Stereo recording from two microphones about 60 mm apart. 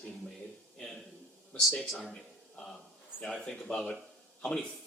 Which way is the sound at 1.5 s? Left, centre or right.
Left.